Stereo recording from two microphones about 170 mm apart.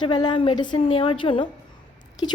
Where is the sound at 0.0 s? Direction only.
25° left (ahead or behind).